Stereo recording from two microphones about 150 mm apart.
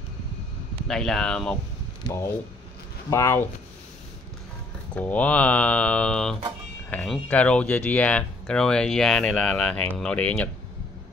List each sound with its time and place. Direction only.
0.8 s speech: 5° left (ahead or behind)
2.0 s speech: 20° left (ahead or behind)
4.9 s speech: 10° left (ahead or behind)